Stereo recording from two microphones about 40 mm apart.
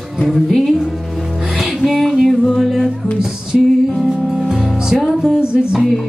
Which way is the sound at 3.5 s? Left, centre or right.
Centre.